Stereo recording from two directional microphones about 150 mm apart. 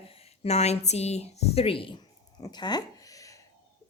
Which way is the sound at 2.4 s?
30° left (ahead or behind).